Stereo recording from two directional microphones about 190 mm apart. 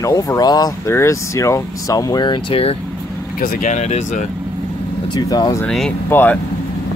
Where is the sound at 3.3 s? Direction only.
45° left (ahead or behind).